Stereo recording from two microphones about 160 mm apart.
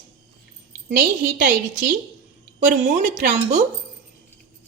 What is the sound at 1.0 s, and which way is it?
A woman's voice, 60° right (ahead or behind).